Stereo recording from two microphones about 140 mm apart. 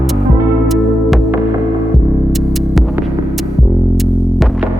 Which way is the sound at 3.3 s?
Centre (ahead or behind).